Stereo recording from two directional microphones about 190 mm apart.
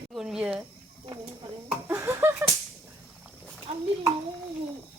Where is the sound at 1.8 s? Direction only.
15° right (ahead or behind).